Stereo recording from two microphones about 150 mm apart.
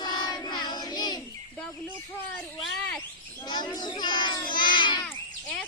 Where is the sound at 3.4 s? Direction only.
30° left (ahead or behind).